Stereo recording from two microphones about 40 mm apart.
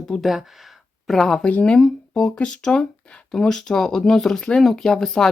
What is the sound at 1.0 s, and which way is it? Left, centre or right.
Speech, centre.